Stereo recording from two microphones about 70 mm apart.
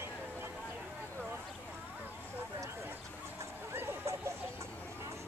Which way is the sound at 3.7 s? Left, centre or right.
Right.